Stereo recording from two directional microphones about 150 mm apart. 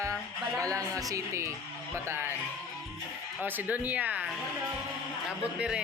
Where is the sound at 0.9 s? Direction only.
20° right (ahead or behind).